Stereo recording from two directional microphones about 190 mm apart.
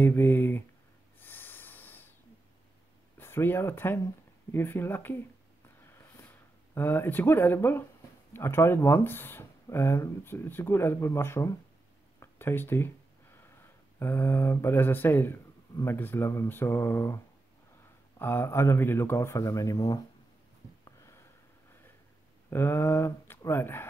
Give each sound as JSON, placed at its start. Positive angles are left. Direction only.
{"t": 0.0, "sound": "speech", "side_deg": 10}
{"t": 1.2, "sound": "snort", "side_deg": 10}
{"t": 3.2, "sound": "speech", "side_deg": 10}
{"t": 5.9, "sound": "a sound", "side_deg": 15}
{"t": 8.3, "sound": "speech", "side_deg": 10}
{"t": 18.2, "sound": "speech", "side_deg": 10}
{"t": 20.8, "sound": "a sound", "side_deg": 15}
{"t": 22.5, "sound": "speech", "side_deg": 10}